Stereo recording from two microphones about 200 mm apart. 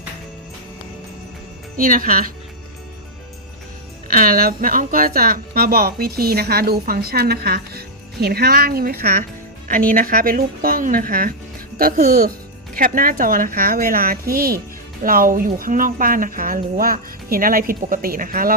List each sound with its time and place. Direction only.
1.7 s a woman's voice: 45° right (ahead or behind)
4.1 s a woman's voice: 45° right (ahead or behind)